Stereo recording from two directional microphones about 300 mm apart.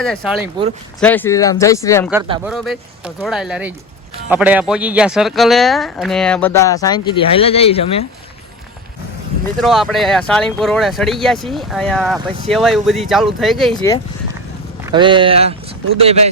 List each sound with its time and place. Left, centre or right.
0.0 s speech: centre
2.4 s speech: centre
9.6 s speech: centre
13.7 s speech: centre
14.8 s speech: centre